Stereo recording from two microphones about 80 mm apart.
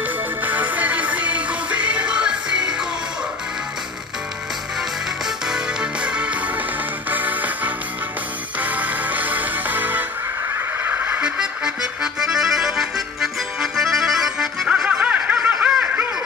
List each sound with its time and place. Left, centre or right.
0.0 s music: right
5.2 s music: centre
14.9 s snicker: centre